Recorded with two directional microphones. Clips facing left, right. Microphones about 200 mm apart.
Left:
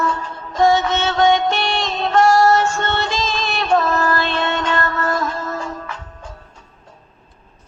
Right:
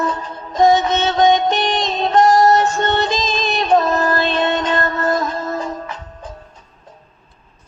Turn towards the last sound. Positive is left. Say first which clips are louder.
# right 1 dB
turn(degrees=-20)  # may be behind; listen again after turning